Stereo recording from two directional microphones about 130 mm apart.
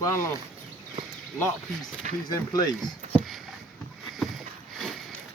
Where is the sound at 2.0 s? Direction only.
75° right (ahead or behind).